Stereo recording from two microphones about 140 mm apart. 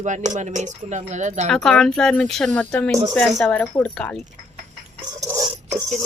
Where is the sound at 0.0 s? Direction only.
60° right (ahead or behind).